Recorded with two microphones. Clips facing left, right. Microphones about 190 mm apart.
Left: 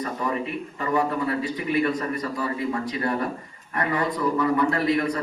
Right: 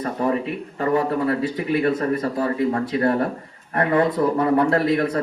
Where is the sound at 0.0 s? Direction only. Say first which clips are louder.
Right 5 dB; 55° right (ahead or behind).